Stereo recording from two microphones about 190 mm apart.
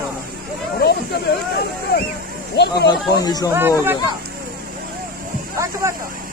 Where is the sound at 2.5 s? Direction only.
60° left (ahead or behind).